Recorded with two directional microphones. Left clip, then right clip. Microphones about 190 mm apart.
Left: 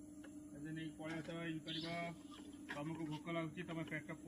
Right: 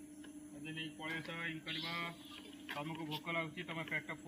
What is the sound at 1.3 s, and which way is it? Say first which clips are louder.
A man's voice: right 4 dB; 25° right (ahead or behind).